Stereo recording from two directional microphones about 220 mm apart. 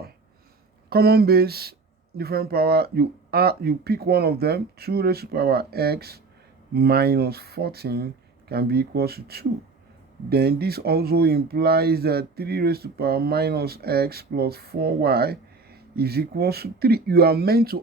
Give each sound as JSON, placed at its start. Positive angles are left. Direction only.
{"t": 0.9, "sound": "speech", "side_deg": -45}